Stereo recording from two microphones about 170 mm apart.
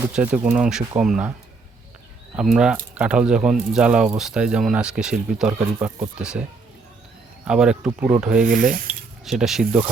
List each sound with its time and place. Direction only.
0.2 s speech: 10° right (ahead or behind)
2.3 s speech: 5° right (ahead or behind)
7.4 s speech: 5° right (ahead or behind)
8.4 s rub: 55° right (ahead or behind)
8.9 s speech: 5° right (ahead or behind)